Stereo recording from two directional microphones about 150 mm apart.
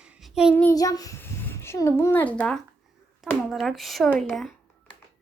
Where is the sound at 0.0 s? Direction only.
5° right (ahead or behind).